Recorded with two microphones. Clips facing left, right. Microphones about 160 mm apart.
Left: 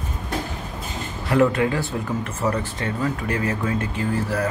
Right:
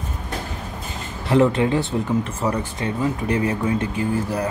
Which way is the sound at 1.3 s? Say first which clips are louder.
Right 2 dB; 25° right (ahead or behind).